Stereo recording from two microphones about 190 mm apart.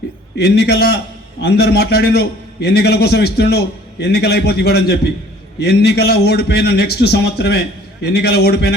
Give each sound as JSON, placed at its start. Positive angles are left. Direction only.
{"t": 0.3, "sound": "a man's voice", "side_deg": 60}